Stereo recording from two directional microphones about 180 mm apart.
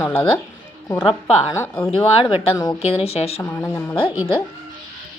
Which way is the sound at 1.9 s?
30° left (ahead or behind).